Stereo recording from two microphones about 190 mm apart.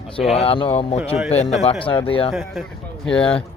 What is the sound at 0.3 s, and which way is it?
Speech, 30° left (ahead or behind).